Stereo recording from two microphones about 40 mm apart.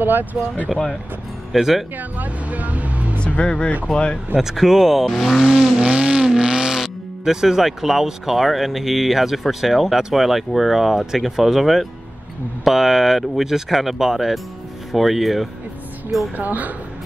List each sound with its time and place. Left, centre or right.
0.0 s speech: right
1.5 s speech: centre
2.0 s vehicle: right
3.3 s speech: left
4.4 s speech: centre
5.4 s speech: centre
5.8 s vehicle: right
6.2 s speech: centre
16.3 s speech: right